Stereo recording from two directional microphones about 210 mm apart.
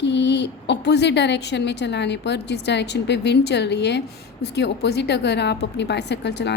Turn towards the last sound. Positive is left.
turn(degrees=55)  # may be behind; listen again after turning